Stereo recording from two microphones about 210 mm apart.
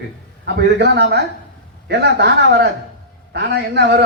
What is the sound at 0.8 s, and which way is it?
A man's voice, 55° right (ahead or behind).